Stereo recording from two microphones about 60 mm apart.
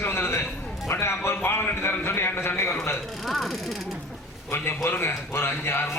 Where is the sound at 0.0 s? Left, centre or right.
Left.